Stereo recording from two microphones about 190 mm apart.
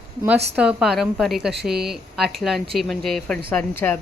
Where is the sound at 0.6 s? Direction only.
5° right (ahead or behind).